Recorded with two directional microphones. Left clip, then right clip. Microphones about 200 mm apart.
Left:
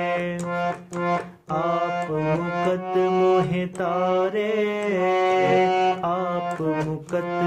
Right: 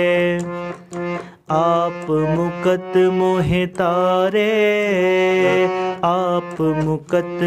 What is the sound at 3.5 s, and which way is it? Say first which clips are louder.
Mantra: right 7 dB; 55° right (ahead or behind).